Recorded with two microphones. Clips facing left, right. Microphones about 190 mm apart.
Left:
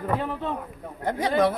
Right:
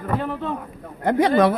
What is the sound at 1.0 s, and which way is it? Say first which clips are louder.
Speech: right 6 dB; 80° right.